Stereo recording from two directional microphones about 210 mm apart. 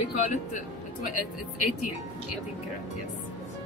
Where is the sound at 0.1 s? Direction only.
35° left (ahead or behind).